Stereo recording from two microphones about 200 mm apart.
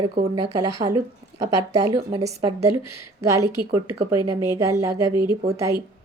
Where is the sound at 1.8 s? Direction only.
25° right (ahead or behind).